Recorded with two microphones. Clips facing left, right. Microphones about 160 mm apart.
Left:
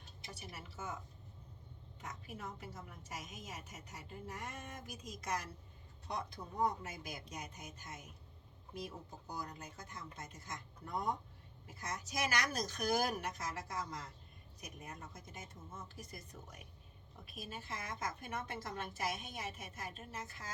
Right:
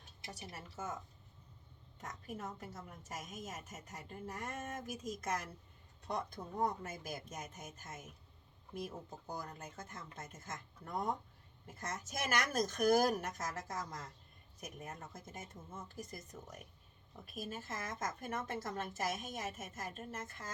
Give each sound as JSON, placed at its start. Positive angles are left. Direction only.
{"t": 0.3, "sound": "a woman's voice", "side_deg": -40}
{"t": 2.0, "sound": "a woman's voice", "side_deg": -45}
{"t": 17.2, "sound": "a woman's voice", "side_deg": -45}